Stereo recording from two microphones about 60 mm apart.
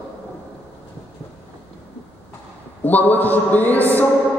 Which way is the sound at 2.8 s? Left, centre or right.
Left.